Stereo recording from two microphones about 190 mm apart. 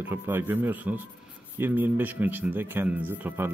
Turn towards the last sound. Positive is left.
turn(degrees=-10)  # may be behind; listen again after turning